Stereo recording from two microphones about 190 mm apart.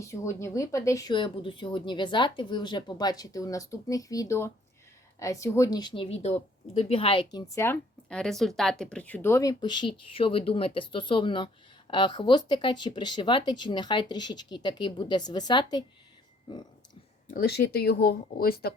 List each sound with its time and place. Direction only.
0.0 s speech: 15° left (ahead or behind)
7.3 s speech: 15° left (ahead or behind)
16.5 s a sound: 25° left (ahead or behind)
17.2 s speech: 50° left (ahead or behind)